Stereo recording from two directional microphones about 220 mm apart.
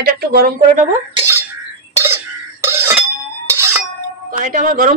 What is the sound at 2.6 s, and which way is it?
Bell, 10° right (ahead or behind).